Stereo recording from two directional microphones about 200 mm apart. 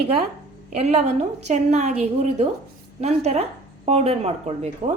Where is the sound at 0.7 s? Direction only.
35° right (ahead or behind).